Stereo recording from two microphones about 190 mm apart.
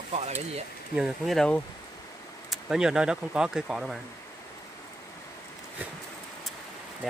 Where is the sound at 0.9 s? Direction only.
Centre (ahead or behind).